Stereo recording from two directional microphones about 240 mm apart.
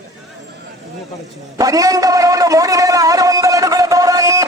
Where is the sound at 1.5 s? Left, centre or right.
Centre.